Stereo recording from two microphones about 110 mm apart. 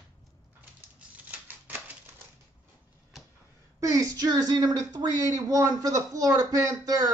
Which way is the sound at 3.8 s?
30° right (ahead or behind).